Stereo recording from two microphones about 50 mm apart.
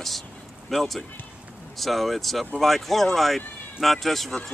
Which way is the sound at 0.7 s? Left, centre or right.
Centre.